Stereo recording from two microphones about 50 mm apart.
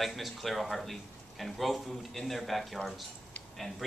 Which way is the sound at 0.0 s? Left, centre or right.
Centre.